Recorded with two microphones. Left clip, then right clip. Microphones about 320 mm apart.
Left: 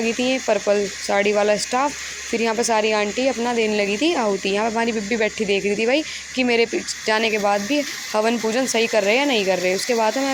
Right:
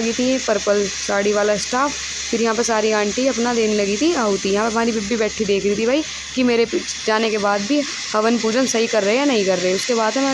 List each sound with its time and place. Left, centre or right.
0.2 s speech: right